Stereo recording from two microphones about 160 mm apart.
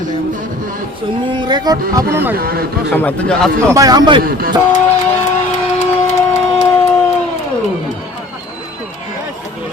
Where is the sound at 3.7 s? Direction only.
25° right (ahead or behind).